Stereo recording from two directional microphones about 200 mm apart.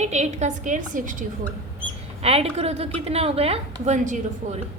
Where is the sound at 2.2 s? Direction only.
30° right (ahead or behind).